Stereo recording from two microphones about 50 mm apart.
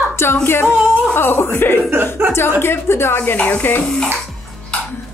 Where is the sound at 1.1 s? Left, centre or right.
Left.